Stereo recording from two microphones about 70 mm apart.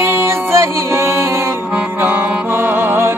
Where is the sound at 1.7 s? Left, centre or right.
Right.